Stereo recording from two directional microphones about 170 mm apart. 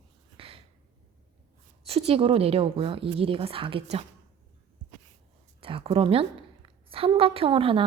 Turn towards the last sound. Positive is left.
turn(degrees=-30)  # may be behind; listen again after turning